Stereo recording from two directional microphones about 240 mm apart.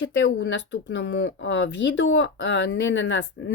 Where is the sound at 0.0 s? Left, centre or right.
Left.